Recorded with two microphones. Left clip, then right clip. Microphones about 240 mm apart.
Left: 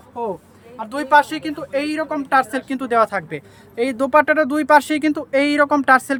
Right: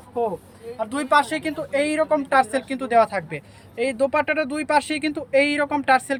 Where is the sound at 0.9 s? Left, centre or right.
Centre.